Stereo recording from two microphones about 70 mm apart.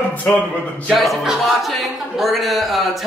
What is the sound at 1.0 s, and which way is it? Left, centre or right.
A man's voice, centre.